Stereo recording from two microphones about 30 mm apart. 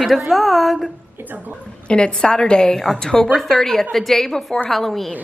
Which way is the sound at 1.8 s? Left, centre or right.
Left.